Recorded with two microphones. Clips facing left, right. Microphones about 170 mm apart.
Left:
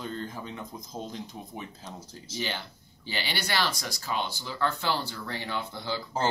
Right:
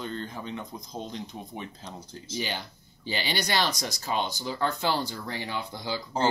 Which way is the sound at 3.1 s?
15° right (ahead or behind).